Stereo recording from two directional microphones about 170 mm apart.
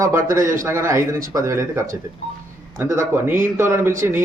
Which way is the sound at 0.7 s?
15° right (ahead or behind).